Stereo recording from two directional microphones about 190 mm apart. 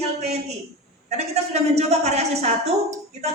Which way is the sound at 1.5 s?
35° right (ahead or behind).